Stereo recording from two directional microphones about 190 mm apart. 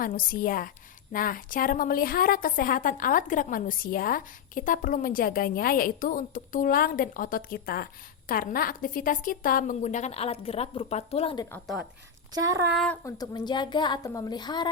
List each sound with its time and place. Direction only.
0.0 s a woman's voice: 45° left (ahead or behind); by 11.4 s 30° left (ahead or behind)
11.6 s speech: centre (ahead or behind)
12.3 s child singing: 20° right (ahead or behind)
12.7 s speech: 5° left (ahead or behind)
13.1 s a woman's voice: 20° left (ahead or behind)